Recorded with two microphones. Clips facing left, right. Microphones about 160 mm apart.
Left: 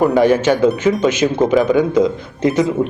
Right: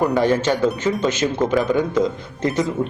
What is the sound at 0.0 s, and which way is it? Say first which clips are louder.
A man's voice: left 5 dB; 10° left (ahead or behind).